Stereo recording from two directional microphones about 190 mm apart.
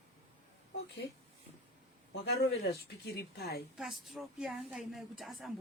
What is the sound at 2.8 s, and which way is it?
Speech, 55° left (ahead or behind).